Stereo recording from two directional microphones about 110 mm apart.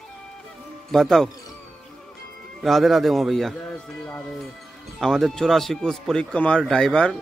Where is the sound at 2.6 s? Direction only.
Centre (ahead or behind).